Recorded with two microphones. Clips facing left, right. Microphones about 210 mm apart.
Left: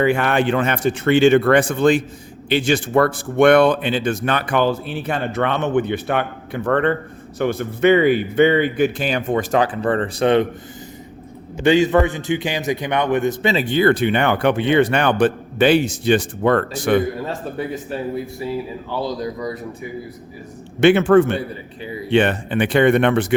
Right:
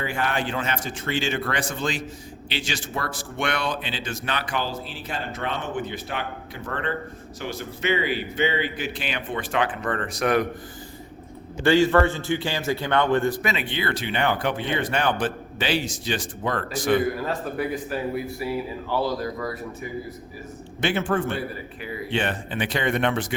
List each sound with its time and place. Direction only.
0.0 s speech: 70° left (ahead or behind); by 10.4 s 30° left (ahead or behind)
11.6 s a man's voice: 20° left (ahead or behind)
13.7 s speech: 45° left (ahead or behind)
18.9 s a man's voice: 15° left (ahead or behind)
20.8 s a man's voice: 75° left (ahead or behind)
22.1 s speech: 65° left (ahead or behind)